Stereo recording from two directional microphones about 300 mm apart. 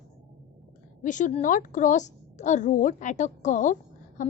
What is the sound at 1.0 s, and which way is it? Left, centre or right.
A woman's voice, left.